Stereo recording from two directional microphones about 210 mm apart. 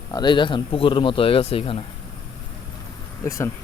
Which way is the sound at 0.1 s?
20° left (ahead or behind).